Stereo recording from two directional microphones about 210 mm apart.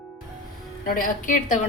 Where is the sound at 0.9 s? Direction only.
40° left (ahead or behind).